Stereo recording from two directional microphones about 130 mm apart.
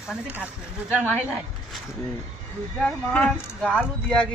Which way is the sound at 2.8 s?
10° left (ahead or behind).